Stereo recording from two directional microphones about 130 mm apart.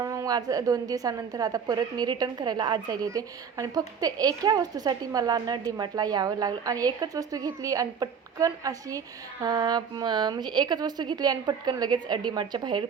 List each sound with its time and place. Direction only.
0.0 s a woman's voice: 25° right (ahead or behind)